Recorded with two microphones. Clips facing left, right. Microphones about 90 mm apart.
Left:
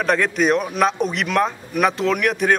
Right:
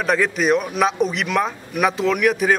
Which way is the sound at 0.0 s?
Centre (ahead or behind).